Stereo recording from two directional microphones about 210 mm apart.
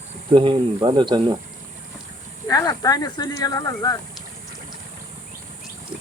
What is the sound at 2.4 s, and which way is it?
Speech, 20° left (ahead or behind).